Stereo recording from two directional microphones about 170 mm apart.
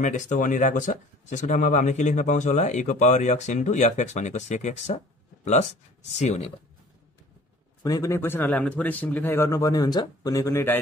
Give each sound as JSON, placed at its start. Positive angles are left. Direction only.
{"t": 0.0, "sound": "speech", "side_deg": 45}
{"t": 7.8, "sound": "a man's voice", "side_deg": 20}